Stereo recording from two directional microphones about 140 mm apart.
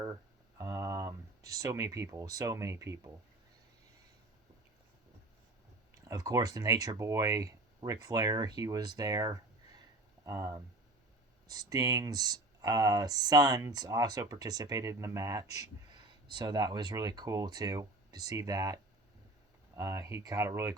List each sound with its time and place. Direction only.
0.6 s speech: 20° right (ahead or behind)
5.9 s speech: 25° right (ahead or behind)